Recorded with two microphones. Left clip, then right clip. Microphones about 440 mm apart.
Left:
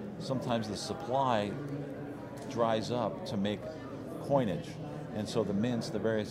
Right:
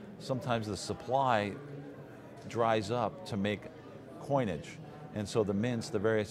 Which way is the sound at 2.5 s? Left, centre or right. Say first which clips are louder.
Right 1 dB; right.